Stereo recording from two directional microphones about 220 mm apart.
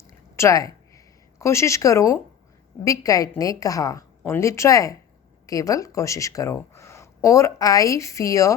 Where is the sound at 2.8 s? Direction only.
15° left (ahead or behind).